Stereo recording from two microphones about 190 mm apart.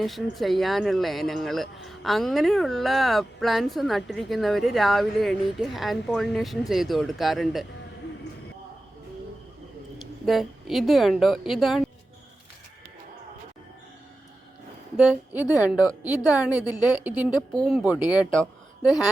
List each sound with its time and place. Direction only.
0.0 s speech: centre (ahead or behind)
10.2 s speech: centre (ahead or behind)
14.9 s a woman's voice: 5° right (ahead or behind)